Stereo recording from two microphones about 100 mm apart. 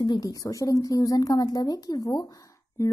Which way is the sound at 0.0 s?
45° left (ahead or behind).